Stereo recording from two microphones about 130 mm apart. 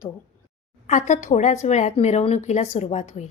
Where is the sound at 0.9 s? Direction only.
65° left (ahead or behind).